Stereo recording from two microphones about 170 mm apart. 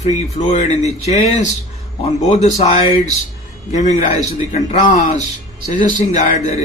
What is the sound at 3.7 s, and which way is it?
Speech, 40° left (ahead or behind).